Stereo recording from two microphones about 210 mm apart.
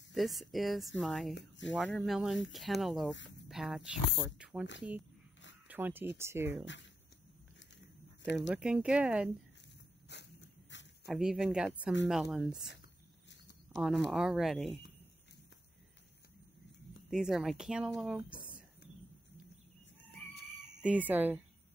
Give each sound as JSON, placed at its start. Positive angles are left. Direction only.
{"t": 0.1, "sound": "speech", "side_deg": 0}
{"t": 5.7, "sound": "speech", "side_deg": -10}
{"t": 6.6, "sound": "speech", "side_deg": 60}
{"t": 8.2, "sound": "speech", "side_deg": 55}
{"t": 8.5, "sound": "speech", "side_deg": -5}
{"t": 10.1, "sound": "dog", "side_deg": 55}
{"t": 10.7, "sound": "a sound", "side_deg": 60}
{"t": 11.1, "sound": "speech", "side_deg": -5}
{"t": 13.7, "sound": "speech", "side_deg": 0}
{"t": 17.1, "sound": "speech", "side_deg": 0}
{"t": 20.6, "sound": "speech", "side_deg": -5}